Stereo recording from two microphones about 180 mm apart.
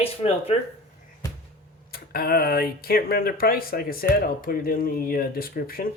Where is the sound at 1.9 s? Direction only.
55° left (ahead or behind).